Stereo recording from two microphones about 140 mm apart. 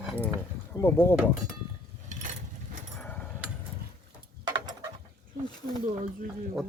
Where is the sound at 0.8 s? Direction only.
15° left (ahead or behind).